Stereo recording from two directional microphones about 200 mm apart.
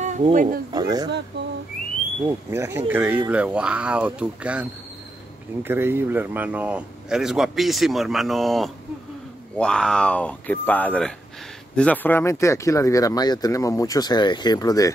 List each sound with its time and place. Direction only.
0.0 s speech: 35° right (ahead or behind)
0.7 s speech: 20° right (ahead or behind)
2.2 s speech: 10° right (ahead or behind); by 15.0 s 15° left (ahead or behind)